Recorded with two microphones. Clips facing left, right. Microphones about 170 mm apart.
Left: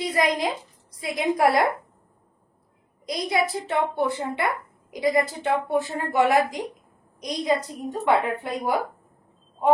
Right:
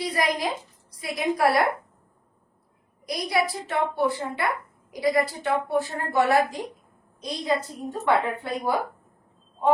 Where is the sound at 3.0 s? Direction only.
20° left (ahead or behind).